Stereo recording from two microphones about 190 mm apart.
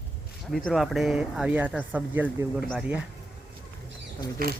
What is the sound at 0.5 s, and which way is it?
Speech, centre (ahead or behind).